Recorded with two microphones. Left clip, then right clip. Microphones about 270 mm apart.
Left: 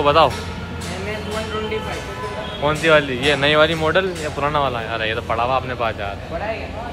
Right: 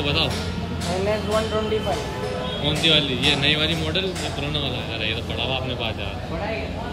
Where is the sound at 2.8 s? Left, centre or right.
Centre.